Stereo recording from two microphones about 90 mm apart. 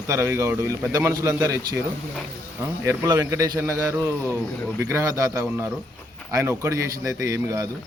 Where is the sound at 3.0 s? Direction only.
40° right (ahead or behind).